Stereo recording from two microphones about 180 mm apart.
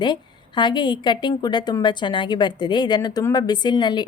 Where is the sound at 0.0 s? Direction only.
25° left (ahead or behind).